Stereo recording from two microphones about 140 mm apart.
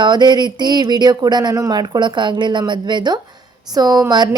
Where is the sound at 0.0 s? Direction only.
30° right (ahead or behind).